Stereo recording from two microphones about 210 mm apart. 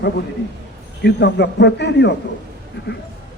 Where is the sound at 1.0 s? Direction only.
55° left (ahead or behind).